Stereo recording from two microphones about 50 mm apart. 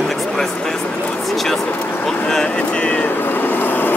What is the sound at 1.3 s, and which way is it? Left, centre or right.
Vehicle, centre.